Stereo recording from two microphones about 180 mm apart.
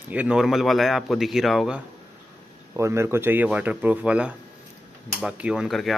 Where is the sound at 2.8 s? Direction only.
15° right (ahead or behind); by 5.9 s centre (ahead or behind).